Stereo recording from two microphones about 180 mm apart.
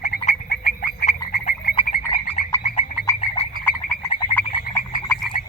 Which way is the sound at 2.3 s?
40° left (ahead or behind).